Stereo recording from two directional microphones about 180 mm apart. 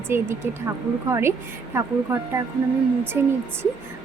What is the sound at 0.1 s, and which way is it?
Speech, 15° right (ahead or behind).